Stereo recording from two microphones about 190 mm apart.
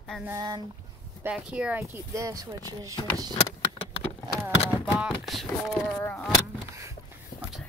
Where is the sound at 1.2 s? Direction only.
5° right (ahead or behind).